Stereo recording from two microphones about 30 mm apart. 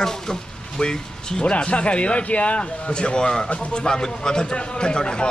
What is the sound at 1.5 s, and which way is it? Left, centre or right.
Speech, left.